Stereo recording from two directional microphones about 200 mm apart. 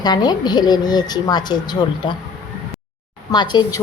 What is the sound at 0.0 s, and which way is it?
Speech, 20° left (ahead or behind).